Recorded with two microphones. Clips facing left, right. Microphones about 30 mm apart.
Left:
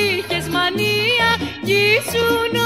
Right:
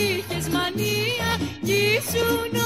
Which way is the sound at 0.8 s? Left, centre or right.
Left.